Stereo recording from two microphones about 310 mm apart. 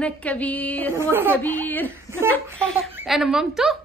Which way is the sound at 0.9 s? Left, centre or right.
Centre.